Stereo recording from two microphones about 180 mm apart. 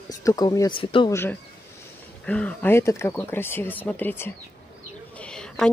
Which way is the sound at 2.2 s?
5° left (ahead or behind).